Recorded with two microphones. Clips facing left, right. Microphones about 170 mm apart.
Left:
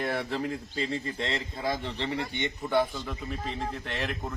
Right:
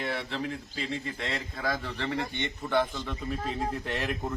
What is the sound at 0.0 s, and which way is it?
A man's voice, 45° left (ahead or behind).